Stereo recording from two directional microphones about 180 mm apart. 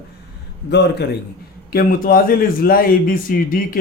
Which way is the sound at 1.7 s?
55° left (ahead or behind).